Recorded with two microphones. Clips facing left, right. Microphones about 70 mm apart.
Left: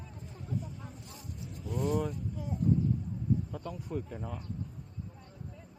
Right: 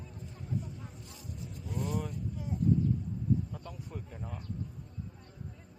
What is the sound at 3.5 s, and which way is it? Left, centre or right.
Speech, centre.